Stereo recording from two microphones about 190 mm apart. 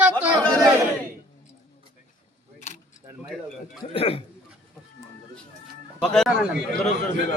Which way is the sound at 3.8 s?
30° left (ahead or behind).